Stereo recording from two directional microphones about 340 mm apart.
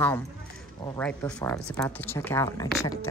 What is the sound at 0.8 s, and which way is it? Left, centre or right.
Speech, centre.